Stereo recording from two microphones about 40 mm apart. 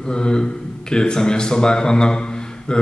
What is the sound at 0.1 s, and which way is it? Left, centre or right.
Speech, left.